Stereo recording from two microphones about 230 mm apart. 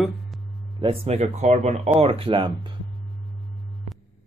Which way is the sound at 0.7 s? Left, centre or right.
Right.